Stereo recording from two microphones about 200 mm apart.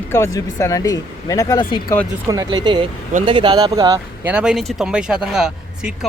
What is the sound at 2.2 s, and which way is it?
Speech, 20° right (ahead or behind).